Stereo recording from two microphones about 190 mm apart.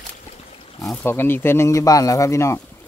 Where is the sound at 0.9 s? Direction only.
10° left (ahead or behind).